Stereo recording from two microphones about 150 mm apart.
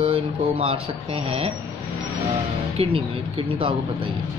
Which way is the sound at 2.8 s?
40° right (ahead or behind).